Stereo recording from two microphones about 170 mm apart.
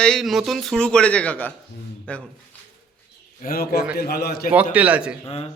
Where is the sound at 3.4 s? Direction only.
65° left (ahead or behind).